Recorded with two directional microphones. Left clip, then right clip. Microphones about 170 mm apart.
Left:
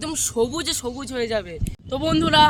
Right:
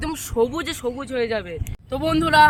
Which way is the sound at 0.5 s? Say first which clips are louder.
Even; 80° left.